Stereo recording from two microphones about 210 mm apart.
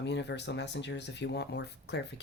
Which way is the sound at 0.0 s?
55° left (ahead or behind).